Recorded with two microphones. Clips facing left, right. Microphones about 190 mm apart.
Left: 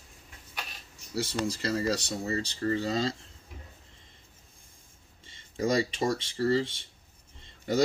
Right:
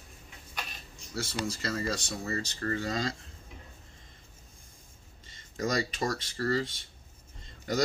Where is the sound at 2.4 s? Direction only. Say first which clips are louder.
Left 5 dB; 25° left (ahead or behind).